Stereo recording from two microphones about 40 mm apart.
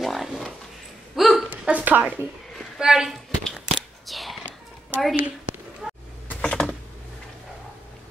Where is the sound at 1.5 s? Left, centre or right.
Right.